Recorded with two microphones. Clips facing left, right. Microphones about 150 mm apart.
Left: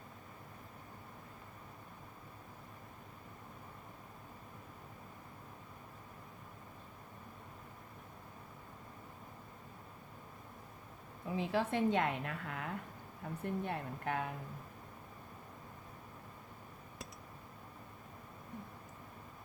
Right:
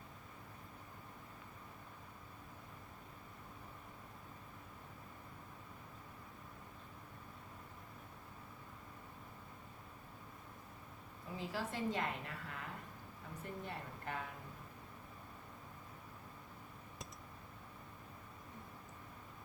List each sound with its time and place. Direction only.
11.3 s a woman's voice: 65° left (ahead or behind)